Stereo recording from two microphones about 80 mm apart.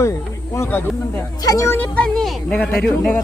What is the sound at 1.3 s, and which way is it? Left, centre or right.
Speech, left.